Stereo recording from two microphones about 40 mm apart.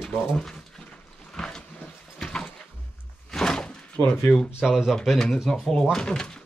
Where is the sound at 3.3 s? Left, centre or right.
Centre.